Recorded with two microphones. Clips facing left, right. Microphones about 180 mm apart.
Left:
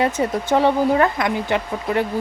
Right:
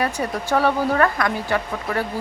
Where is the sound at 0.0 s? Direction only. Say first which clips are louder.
Left 4 dB; 20° left (ahead or behind).